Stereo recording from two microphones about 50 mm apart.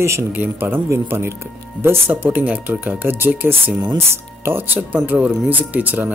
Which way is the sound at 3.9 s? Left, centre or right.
Right.